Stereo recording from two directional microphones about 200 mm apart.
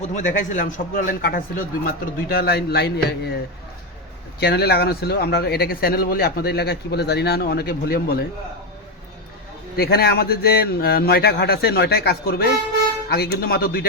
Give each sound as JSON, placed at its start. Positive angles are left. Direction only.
{"t": 0.2, "sound": "speech", "side_deg": 40}
{"t": 4.4, "sound": "speech", "side_deg": 55}
{"t": 9.7, "sound": "speech", "side_deg": 50}